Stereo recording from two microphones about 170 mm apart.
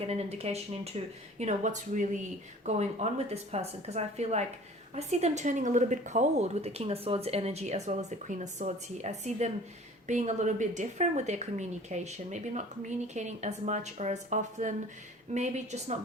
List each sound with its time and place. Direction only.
0.0 s a woman's voice: 35° right (ahead or behind)